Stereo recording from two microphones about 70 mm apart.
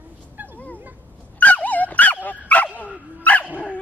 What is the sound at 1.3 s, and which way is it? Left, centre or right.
Dog, left.